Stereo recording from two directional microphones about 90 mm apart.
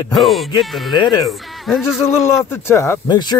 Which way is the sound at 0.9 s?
55° left (ahead or behind).